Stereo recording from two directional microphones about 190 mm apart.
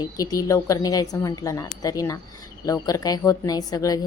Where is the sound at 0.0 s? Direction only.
20° left (ahead or behind).